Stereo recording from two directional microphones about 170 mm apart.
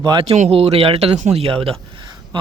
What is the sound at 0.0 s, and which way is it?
Speech, 30° right (ahead or behind).